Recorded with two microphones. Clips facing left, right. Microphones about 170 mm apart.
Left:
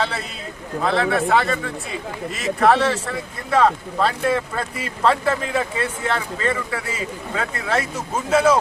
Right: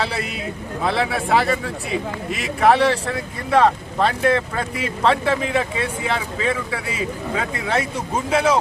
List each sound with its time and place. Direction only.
0.0 s speech: centre (ahead or behind)